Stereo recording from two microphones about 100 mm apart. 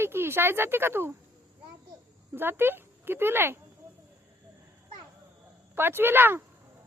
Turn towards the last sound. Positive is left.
turn(degrees=-20)  # may be behind; listen again after turning